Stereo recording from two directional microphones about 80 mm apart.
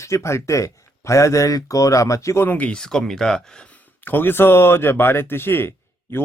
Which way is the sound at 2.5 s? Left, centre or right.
Centre.